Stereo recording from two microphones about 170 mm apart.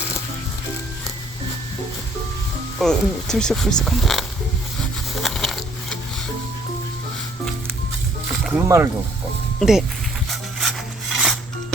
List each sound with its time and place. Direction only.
2.7 s speech: 5° left (ahead or behind)
5.2 s a sound: centre (ahead or behind)
8.3 s music: centre (ahead or behind)
8.6 s speech: 15° right (ahead or behind)
9.6 s speech: centre (ahead or behind)
10.2 s rub: centre (ahead or behind)